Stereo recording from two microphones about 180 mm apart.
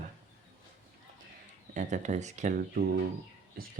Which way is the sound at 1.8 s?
45° right (ahead or behind).